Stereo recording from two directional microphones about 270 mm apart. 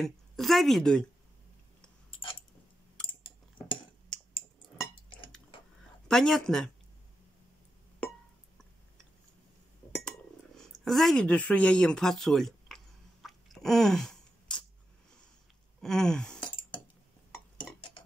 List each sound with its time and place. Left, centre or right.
0.0 s a woman's voice: centre
6.0 s speech: centre
10.6 s a sound: centre
15.8 s speech: centre